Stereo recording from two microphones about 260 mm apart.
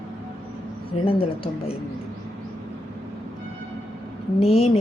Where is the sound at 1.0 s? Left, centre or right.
Left.